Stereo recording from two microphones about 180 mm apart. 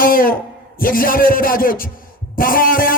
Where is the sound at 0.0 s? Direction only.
50° left (ahead or behind).